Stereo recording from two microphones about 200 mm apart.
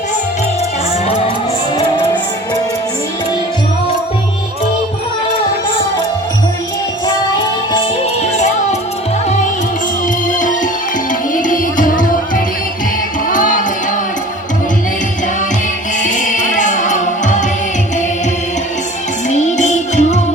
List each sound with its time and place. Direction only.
8.2 s music: 35° left (ahead or behind)
10.2 s music: 40° left (ahead or behind)
13.2 s music: 40° left (ahead or behind)
16.0 s music: 40° left (ahead or behind)
19.3 s music: 35° left (ahead or behind)